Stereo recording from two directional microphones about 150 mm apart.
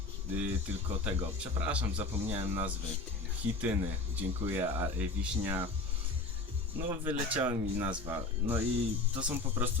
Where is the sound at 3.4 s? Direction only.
15° right (ahead or behind).